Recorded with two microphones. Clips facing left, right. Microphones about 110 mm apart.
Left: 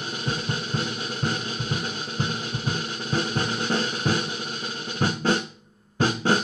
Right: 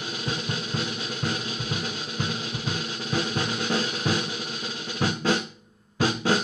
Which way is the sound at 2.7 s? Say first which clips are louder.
Left 1 dB; 35° left (ahead or behind).